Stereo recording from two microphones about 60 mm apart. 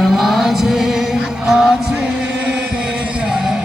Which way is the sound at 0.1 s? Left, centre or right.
Centre.